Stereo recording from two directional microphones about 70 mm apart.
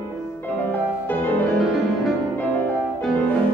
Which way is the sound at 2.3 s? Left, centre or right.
Left.